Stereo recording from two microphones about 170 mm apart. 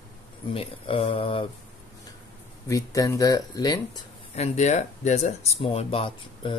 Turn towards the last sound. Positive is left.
turn(degrees=30)  # may be behind; listen again after turning